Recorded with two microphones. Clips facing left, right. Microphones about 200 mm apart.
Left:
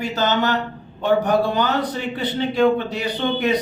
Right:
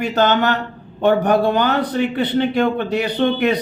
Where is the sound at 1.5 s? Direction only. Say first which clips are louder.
Right 4 dB; 60° right (ahead or behind).